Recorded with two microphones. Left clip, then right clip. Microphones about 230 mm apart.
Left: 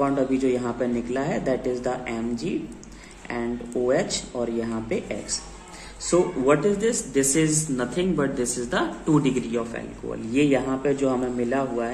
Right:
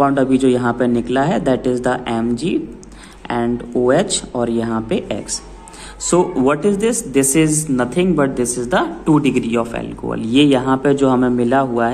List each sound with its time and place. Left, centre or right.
0.0 s speech: right
6.0 s speech: right